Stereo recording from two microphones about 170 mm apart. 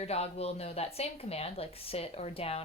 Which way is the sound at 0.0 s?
35° left (ahead or behind).